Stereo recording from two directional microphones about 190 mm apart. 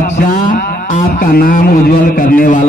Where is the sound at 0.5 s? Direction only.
45° left (ahead or behind).